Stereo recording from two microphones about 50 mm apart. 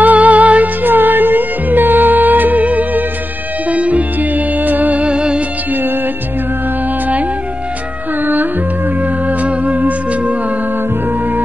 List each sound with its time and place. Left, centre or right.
0.0 s music: right
5.7 s music: right
8.2 s music: right